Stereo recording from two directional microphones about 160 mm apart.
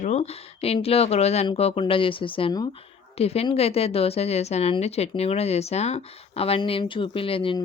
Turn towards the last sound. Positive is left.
turn(degrees=35)  # may be behind; listen again after turning